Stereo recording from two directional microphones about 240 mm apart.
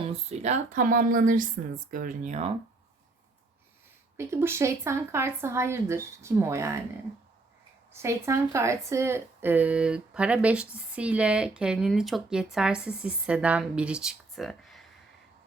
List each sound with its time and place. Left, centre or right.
0.1 s speech: right
4.2 s speech: centre
8.0 s speech: centre